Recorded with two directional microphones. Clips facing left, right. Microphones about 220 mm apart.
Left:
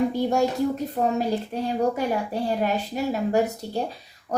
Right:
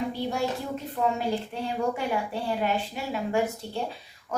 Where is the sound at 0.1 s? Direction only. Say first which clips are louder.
Left 7 dB; 45° left (ahead or behind).